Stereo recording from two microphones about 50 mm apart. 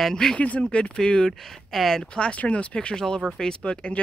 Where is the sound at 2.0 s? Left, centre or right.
Left.